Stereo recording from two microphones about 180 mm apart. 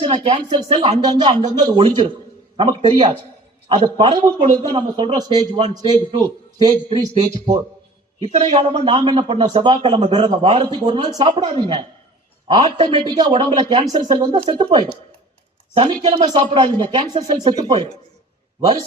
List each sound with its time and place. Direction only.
0.0 s a man's voice: 30° right (ahead or behind)
8.2 s a man's voice: 35° right (ahead or behind)
17.6 s speech: 35° right (ahead or behind)